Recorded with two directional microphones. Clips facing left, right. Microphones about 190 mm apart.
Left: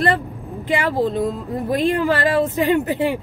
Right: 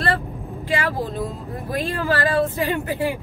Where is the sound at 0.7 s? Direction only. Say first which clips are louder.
Left 5 dB; 20° left (ahead or behind).